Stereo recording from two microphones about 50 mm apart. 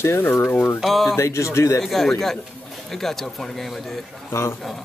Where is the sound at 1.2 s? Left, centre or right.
Left.